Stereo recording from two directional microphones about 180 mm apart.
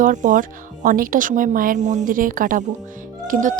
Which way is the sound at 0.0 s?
45° right (ahead or behind).